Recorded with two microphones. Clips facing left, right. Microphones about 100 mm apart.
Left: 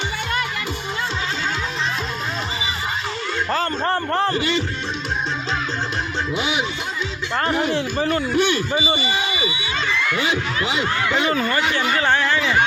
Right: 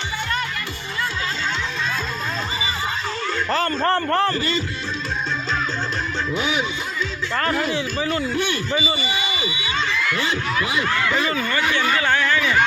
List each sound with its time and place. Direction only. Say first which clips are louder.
3.8 s a man's voice: right 2 dB; 15° left (ahead or behind)
6.3 s speech: even; 20° left (ahead or behind)
7.8 s speech: left 2 dB; 50° left (ahead or behind)
8.4 s a sound: left 5 dB; 20° left (ahead or behind)
8.7 s speech: left 1 dB; 30° left (ahead or behind)
10.2 s speech: left 1 dB; 20° left (ahead or behind)
11.3 s speech: left 2 dB; 30° left (ahead or behind)
11.9 s speech: left 1 dB; 30° left (ahead or behind)